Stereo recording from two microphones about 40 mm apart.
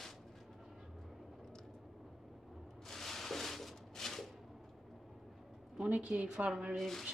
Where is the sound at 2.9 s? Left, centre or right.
Centre.